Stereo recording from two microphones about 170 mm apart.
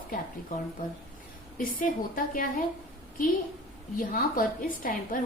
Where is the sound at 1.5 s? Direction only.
55° left (ahead or behind).